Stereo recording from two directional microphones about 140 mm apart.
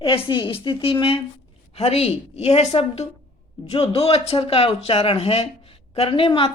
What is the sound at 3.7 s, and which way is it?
Speech, 45° left (ahead or behind).